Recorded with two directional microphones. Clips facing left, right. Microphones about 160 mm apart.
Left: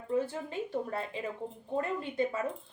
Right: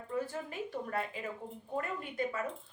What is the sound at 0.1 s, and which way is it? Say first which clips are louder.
A woman's voice: left 5 dB; 25° left (ahead or behind).